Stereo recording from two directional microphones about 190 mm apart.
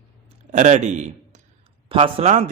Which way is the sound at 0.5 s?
40° right (ahead or behind).